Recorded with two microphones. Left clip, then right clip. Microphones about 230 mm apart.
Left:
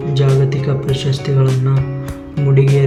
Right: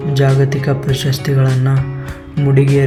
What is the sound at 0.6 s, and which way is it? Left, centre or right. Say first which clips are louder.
Speech: right 1 dB; centre.